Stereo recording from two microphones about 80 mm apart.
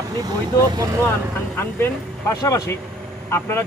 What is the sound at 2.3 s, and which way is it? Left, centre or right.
Speech, left.